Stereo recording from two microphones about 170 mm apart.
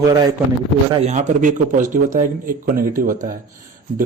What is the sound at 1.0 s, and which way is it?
A man's voice, 45° right (ahead or behind).